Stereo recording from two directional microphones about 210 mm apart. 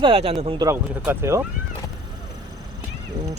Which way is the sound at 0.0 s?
25° right (ahead or behind).